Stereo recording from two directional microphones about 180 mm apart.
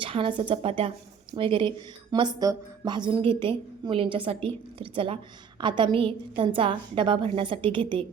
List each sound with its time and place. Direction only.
0.0 s a woman's voice: 30° right (ahead or behind)